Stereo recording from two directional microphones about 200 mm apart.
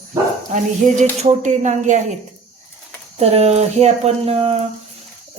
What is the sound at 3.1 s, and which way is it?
A woman's voice, 30° right (ahead or behind).